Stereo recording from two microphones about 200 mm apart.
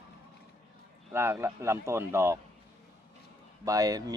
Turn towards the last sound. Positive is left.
turn(degrees=-20)  # may be behind; listen again after turning